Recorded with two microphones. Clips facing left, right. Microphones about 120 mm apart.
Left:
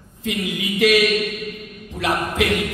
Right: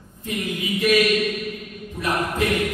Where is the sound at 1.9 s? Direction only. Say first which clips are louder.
Left 2 dB; 80° left.